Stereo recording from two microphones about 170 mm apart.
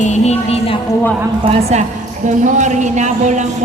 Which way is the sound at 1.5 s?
40° right (ahead or behind).